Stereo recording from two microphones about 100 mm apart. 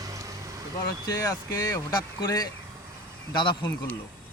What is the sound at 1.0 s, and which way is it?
Speech, 40° left (ahead or behind).